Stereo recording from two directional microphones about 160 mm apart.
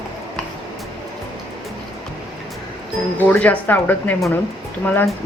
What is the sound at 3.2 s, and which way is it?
Speech, 10° left (ahead or behind).